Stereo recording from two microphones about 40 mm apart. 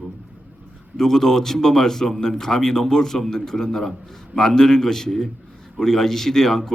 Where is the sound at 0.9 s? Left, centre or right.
Centre.